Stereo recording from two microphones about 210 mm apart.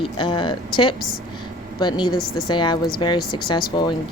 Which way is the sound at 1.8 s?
20° left (ahead or behind).